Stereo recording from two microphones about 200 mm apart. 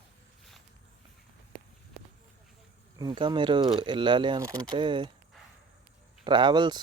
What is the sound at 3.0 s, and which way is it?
Speech, 20° right (ahead or behind).